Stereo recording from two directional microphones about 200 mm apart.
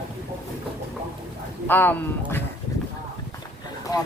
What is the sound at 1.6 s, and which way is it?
Speech, 10° left (ahead or behind).